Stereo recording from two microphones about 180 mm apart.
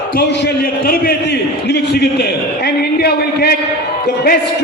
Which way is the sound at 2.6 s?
65° left (ahead or behind).